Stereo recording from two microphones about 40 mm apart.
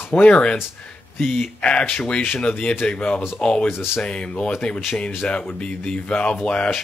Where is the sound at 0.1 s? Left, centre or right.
Left.